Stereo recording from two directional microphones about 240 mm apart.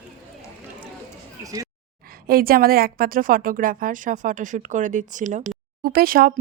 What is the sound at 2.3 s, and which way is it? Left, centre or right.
Speech, right.